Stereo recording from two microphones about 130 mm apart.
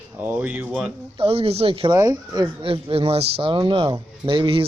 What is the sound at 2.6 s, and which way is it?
Speech, 45° right (ahead or behind).